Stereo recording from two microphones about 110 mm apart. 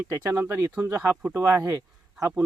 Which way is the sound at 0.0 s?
20° right (ahead or behind).